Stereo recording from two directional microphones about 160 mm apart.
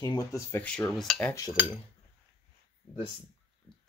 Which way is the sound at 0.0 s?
25° left (ahead or behind).